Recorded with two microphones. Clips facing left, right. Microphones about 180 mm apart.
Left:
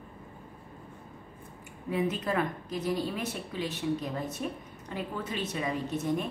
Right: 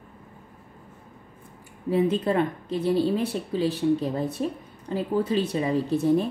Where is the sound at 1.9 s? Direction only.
30° right (ahead or behind).